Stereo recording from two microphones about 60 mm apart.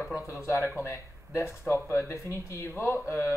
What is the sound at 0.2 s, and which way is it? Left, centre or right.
Speech, left.